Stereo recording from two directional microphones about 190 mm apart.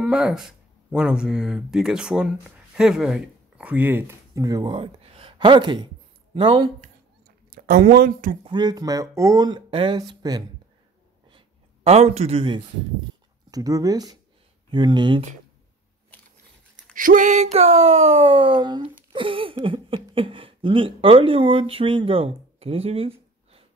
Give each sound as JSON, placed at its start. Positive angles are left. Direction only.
{"t": 0.0, "sound": "speech", "side_deg": -5}
{"t": 7.5, "sound": "speech", "side_deg": -50}
{"t": 8.5, "sound": "speech", "side_deg": -20}
{"t": 11.2, "sound": "a sound", "side_deg": -30}
{"t": 13.5, "sound": "speech", "side_deg": -20}
{"t": 16.9, "sound": "speech", "side_deg": -45}